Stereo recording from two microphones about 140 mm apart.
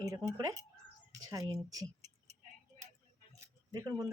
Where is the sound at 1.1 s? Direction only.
25° right (ahead or behind).